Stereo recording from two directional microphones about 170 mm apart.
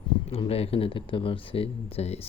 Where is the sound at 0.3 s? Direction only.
35° left (ahead or behind).